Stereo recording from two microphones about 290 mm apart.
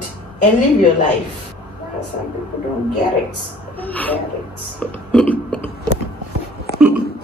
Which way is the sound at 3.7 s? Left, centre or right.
Centre.